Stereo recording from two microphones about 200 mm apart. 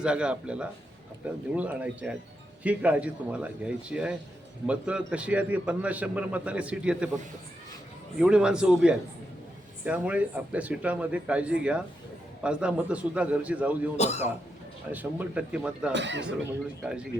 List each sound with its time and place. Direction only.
0.0 s a man's voice: 5° right (ahead or behind)
8.2 s a man's voice: 5° right (ahead or behind)
13.9 s a man's voice: 35° left (ahead or behind)
14.9 s a man's voice: 5° right (ahead or behind)
15.9 s speech: 65° right (ahead or behind)
16.8 s a man's voice: 5° right (ahead or behind)